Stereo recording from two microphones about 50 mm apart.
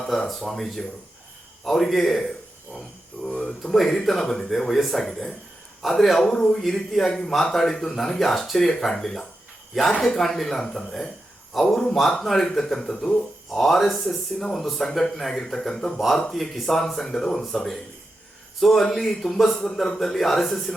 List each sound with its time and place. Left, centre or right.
0.0 s a man's voice: centre
3.2 s speech: centre
3.6 s a man's voice: centre